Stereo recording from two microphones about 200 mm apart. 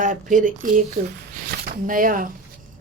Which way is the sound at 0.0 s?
40° right (ahead or behind).